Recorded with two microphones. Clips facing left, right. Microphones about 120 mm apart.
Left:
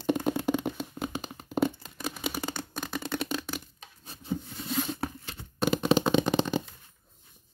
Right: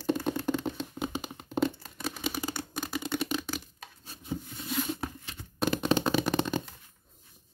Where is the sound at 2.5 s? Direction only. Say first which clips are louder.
Even; 10° right (ahead or behind).